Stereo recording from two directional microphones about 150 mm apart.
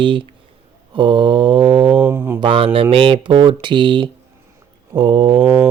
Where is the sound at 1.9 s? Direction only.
15° right (ahead or behind).